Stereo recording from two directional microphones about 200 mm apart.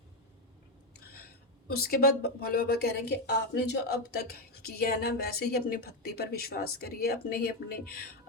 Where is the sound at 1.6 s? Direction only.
50° left (ahead or behind).